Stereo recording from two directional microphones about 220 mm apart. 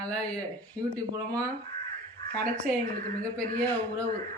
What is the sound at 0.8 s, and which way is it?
Speech, 15° right (ahead or behind).